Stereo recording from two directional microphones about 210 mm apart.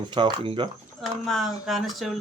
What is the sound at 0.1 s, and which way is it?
Speech, 20° right (ahead or behind).